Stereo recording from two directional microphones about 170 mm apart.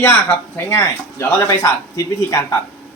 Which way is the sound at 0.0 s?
10° left (ahead or behind).